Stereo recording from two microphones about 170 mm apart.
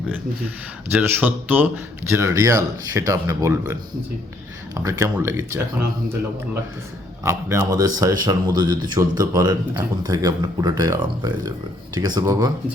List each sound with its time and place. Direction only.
0.9 s speech: 10° right (ahead or behind)
7.3 s speech: 15° right (ahead or behind)